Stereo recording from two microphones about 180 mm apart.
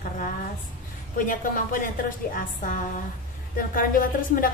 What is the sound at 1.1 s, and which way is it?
A woman's voice, 50° left (ahead or behind).